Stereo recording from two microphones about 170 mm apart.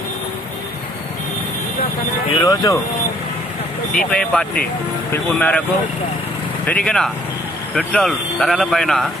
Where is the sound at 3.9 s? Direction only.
5° left (ahead or behind).